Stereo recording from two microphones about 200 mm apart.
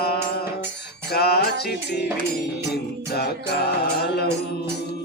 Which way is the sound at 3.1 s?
50° left (ahead or behind).